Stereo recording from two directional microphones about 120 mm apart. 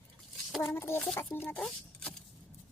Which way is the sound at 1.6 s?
15° left (ahead or behind).